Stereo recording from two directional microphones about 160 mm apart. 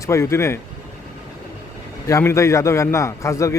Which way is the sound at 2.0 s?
20° left (ahead or behind).